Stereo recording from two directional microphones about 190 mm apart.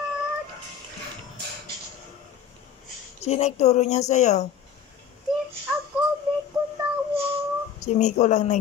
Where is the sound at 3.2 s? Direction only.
35° left (ahead or behind).